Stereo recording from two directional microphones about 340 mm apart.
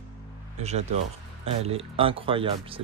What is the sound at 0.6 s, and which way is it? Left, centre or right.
Speech, centre.